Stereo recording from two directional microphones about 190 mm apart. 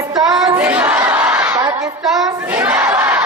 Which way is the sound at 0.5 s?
10° right (ahead or behind).